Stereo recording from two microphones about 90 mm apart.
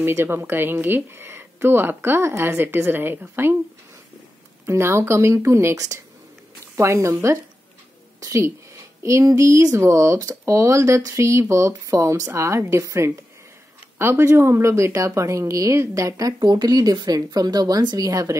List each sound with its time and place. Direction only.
0.0 s speech: 25° right (ahead or behind)
4.6 s a woman's voice: 30° right (ahead or behind)